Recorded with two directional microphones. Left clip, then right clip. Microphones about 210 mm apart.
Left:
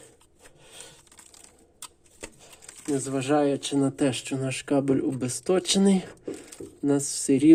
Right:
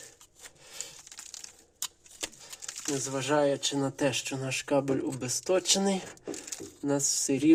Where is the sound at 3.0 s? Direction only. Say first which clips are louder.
Left 2 dB; 20° left (ahead or behind).